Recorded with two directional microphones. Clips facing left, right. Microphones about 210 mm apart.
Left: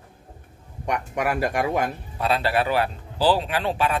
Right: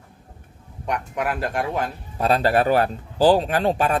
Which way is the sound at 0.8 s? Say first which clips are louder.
Even; 10° left (ahead or behind).